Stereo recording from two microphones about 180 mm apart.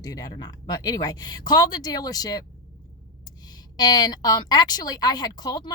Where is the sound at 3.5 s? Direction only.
25° left (ahead or behind).